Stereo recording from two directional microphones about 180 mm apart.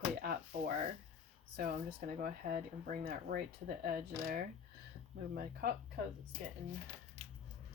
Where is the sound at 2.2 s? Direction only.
50° right (ahead or behind).